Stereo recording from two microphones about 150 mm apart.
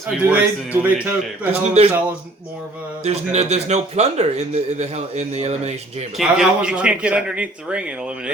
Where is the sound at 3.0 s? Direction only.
45° right (ahead or behind).